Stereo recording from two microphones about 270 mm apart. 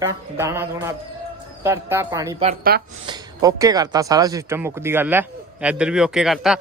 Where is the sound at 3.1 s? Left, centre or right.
Centre.